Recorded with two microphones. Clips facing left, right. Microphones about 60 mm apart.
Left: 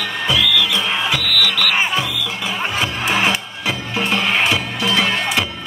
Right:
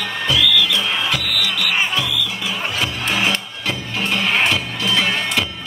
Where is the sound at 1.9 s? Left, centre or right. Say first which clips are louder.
Left 1 dB; left.